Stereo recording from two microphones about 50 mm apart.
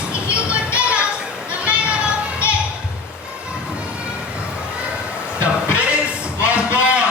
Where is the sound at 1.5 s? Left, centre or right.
Right.